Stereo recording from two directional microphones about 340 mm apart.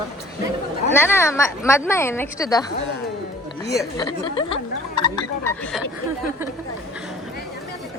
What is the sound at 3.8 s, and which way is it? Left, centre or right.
A woman's voice, centre.